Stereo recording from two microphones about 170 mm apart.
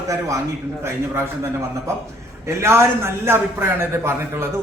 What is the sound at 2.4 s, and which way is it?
A man's voice, 15° right (ahead or behind).